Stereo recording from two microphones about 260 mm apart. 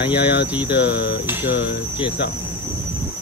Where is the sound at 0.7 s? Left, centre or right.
Left.